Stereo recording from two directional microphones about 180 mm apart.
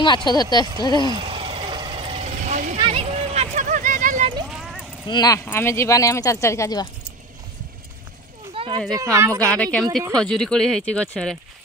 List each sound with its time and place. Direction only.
0.0 s speech: 25° left (ahead or behind)
1.1 s vehicle: 30° right (ahead or behind)
2.8 s a sound: 30° right (ahead or behind); by 4.3 s 50° right (ahead or behind)
4.5 s clip-clop: 5° right (ahead or behind)
5.0 s speech: 20° left (ahead or behind)
8.5 s a sound: 30° right (ahead or behind)
8.9 s speech: 15° right (ahead or behind)
9.4 s speech: 5° left (ahead or behind)